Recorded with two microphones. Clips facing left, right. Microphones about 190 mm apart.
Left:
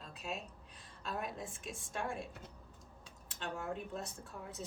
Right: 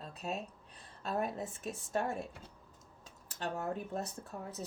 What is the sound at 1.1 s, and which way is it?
Speech, 40° right (ahead or behind).